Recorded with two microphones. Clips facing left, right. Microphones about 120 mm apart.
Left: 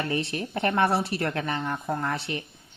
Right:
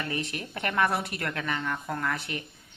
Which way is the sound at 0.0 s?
30° left (ahead or behind).